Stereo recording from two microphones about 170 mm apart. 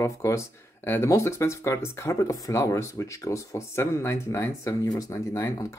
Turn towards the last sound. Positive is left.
turn(degrees=15)  # may be behind; listen again after turning